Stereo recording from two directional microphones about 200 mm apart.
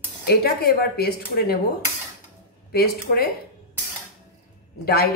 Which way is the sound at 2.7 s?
50° left (ahead or behind).